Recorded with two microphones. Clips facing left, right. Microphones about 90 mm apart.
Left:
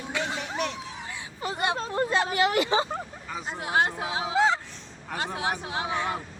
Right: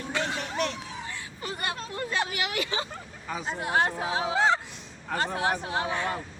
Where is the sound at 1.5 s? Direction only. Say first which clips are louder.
Left 6 dB; 25° left (ahead or behind).